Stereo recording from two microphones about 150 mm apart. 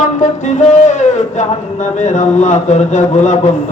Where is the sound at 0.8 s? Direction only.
55° left (ahead or behind).